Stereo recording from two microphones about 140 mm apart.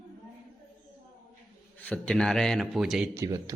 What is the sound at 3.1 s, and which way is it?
Speech, 25° right (ahead or behind).